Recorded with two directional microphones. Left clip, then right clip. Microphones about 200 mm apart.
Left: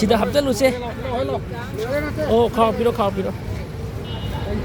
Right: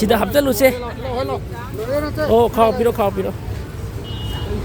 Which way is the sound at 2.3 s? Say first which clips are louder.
Right 3 dB; 45° right (ahead or behind).